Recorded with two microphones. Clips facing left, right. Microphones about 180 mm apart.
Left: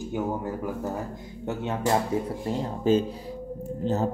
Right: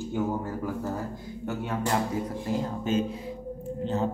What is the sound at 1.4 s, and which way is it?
Speech, 25° left (ahead or behind).